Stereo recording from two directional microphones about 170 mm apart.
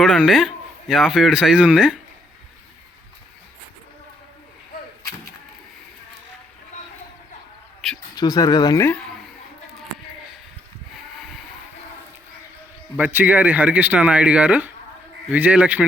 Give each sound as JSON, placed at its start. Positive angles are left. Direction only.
{"t": 0.0, "sound": "a man's voice", "side_deg": 0}
{"t": 8.1, "sound": "speech", "side_deg": 25}
{"t": 13.0, "sound": "speech", "side_deg": -10}